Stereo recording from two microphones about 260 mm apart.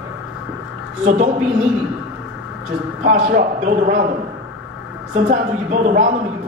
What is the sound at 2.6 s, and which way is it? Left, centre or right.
A man's voice, right.